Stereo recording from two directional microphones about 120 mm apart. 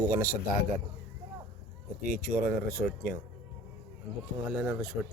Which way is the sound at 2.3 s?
10° right (ahead or behind).